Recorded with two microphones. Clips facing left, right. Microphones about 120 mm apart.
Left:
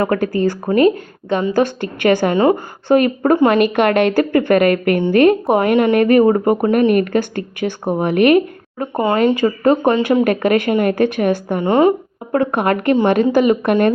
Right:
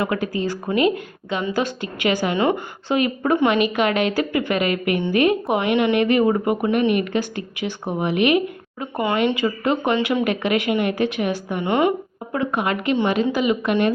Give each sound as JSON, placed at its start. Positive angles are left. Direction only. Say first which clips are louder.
{"t": 0.0, "sound": "a woman's voice", "louder": "left 6 dB", "side_deg": 50}
{"t": 0.6, "sound": "speech", "louder": "left 5 dB", "side_deg": 40}
{"t": 1.6, "sound": "a woman's voice", "louder": "left 7 dB", "side_deg": 55}
{"t": 9.0, "sound": "a woman's voice", "louder": "left 5 dB", "side_deg": 40}
{"t": 11.6, "sound": "speech", "louder": "left 6 dB", "side_deg": 35}
{"t": 12.4, "sound": "a woman's voice", "louder": "left 5 dB", "side_deg": 55}